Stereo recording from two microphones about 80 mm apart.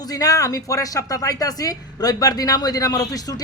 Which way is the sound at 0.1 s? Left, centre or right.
Left.